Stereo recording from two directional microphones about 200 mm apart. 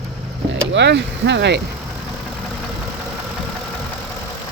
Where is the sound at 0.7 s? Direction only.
60° right (ahead or behind).